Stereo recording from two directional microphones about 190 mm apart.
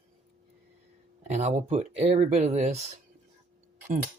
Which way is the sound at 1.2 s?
35° right (ahead or behind).